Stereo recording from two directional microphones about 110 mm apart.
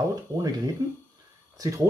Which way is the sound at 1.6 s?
30° right (ahead or behind).